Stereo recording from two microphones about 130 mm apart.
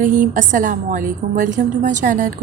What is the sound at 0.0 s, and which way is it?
A woman's voice, 90° right.